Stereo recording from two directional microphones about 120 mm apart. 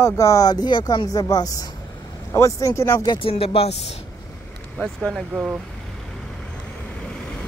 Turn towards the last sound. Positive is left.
turn(degrees=5)  # may be behind; listen again after turning